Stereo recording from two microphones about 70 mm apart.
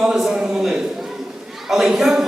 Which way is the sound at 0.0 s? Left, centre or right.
Centre.